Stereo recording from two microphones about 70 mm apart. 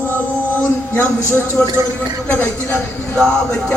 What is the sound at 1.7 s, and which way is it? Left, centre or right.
Speech, right.